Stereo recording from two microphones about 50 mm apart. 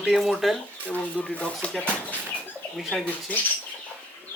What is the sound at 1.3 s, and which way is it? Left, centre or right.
Speech, left.